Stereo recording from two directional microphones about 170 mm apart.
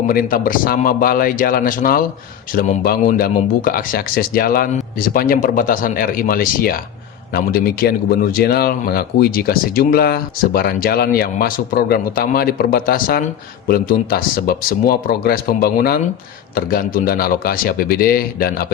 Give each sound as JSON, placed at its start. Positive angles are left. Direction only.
{"t": 0.1, "sound": "a man's voice", "side_deg": 55}